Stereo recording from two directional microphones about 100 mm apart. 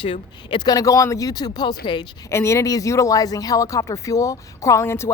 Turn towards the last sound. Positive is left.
turn(degrees=25)  # may be behind; listen again after turning